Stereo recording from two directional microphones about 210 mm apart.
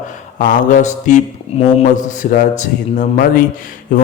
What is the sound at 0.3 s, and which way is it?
A man's voice, 40° left (ahead or behind).